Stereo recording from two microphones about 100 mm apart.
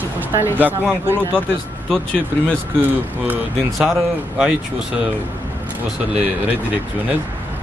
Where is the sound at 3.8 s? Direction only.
5° right (ahead or behind).